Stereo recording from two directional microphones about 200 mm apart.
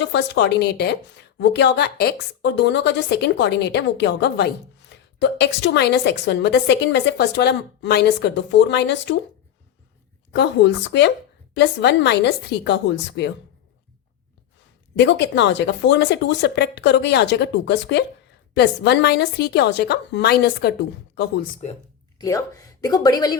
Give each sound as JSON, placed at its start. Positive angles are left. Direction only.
{"t": 0.0, "sound": "a woman's voice", "side_deg": 60}
{"t": 10.3, "sound": "a woman's voice", "side_deg": 60}
{"t": 14.9, "sound": "a woman's voice", "side_deg": 60}
{"t": 21.6, "sound": "speech", "side_deg": 35}
{"t": 22.2, "sound": "speech", "side_deg": 15}